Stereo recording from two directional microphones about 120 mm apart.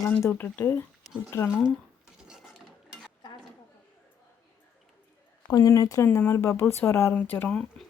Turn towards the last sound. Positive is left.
turn(degrees=5)  # may be behind; listen again after turning